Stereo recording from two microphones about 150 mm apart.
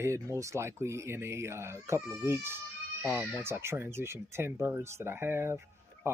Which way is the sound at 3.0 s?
5° right (ahead or behind).